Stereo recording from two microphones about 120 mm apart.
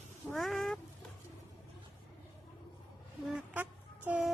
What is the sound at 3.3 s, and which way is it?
Music, 15° right (ahead or behind).